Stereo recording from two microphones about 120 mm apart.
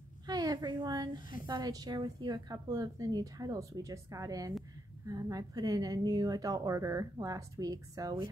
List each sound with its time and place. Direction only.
0.3 s a woman's voice: 35° right (ahead or behind)